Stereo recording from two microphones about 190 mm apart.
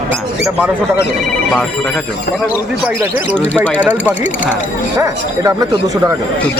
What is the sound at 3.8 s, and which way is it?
Speech, 10° right (ahead or behind).